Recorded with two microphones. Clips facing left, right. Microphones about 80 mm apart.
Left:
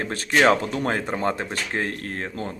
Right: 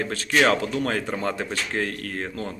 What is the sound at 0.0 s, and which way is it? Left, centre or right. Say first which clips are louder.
A man's voice: left 2 dB; left.